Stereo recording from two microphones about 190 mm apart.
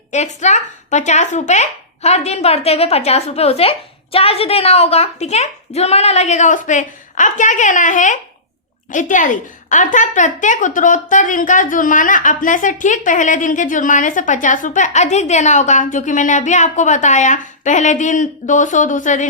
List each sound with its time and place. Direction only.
0.1 s a woman's voice: 35° left (ahead or behind)